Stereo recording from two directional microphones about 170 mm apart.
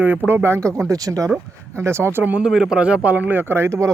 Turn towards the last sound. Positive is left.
turn(degrees=-15)  # may be behind; listen again after turning